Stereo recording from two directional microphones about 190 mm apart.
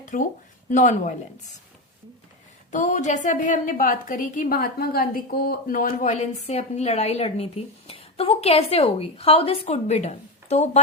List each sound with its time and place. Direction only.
0.0 s a sound: 45° left (ahead or behind)
0.7 s a woman's voice: 40° left (ahead or behind)
2.7 s a woman's voice: 40° left (ahead or behind)